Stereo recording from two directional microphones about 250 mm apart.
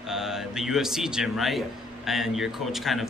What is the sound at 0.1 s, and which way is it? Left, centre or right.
A man's voice, centre.